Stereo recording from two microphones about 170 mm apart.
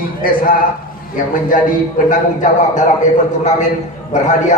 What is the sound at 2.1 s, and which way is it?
Speech, 45° left (ahead or behind).